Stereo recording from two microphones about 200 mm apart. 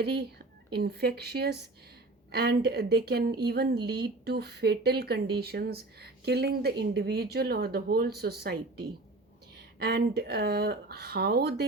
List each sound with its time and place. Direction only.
0.0 s speech: 55° right (ahead or behind)